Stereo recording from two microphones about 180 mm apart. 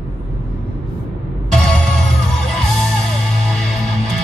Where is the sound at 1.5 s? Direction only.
5° left (ahead or behind).